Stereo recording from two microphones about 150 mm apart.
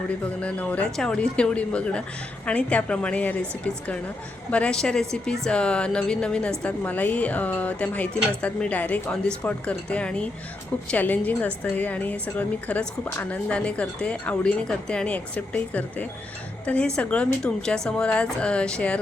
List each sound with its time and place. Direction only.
0.1 s a woman's voice: 10° left (ahead or behind)